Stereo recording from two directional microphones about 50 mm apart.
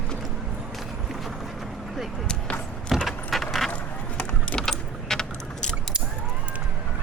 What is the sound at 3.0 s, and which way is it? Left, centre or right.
Keys jangling, centre.